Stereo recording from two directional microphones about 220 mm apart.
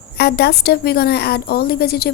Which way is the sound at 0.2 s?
45° left (ahead or behind).